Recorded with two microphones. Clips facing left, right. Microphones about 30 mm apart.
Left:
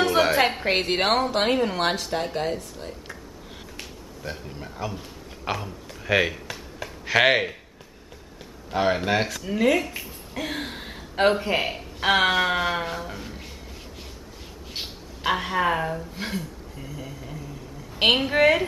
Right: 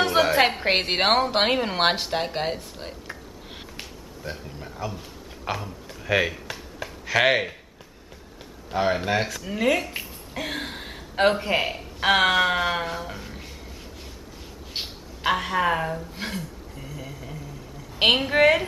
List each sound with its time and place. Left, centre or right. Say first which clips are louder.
0.7 s a woman's voice: right 1 dB; centre
2.3 s a sound: left 1 dB; right
4.2 s speech: left 1 dB; centre
6.4 s a sound: even; centre
7.1 s speech: left 1 dB; centre
8.7 s speech: left 1 dB; centre
9.4 s a woman's voice: left 2 dB; centre
14.8 s a woman's voice: right 1 dB; centre